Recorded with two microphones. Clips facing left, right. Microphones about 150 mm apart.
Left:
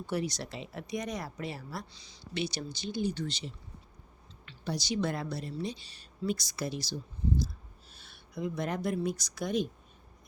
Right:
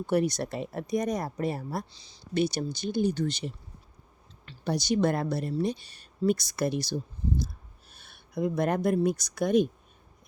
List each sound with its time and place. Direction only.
0.0 s speech: 55° right (ahead or behind)
1.9 s speech: 30° right (ahead or behind)
2.3 s speech: 45° right (ahead or behind)
4.6 s speech: 50° right (ahead or behind)